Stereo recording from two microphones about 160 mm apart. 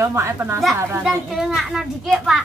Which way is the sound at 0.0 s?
15° right (ahead or behind).